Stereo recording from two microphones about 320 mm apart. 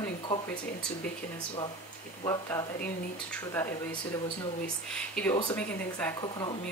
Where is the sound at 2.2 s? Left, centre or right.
Centre.